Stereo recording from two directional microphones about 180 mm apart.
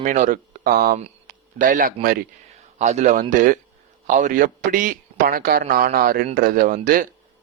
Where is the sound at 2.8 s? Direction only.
40° right (ahead or behind).